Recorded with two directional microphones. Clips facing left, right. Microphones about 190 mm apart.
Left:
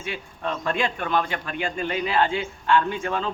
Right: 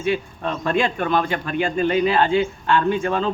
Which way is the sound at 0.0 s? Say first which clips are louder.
Right 8 dB; 25° right (ahead or behind).